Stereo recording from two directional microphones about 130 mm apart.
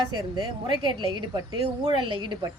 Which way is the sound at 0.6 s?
35° right (ahead or behind).